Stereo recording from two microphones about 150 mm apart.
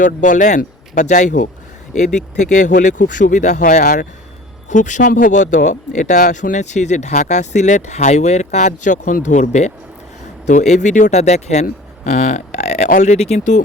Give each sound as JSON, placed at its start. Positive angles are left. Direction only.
{"t": 0.0, "sound": "speech", "side_deg": 60}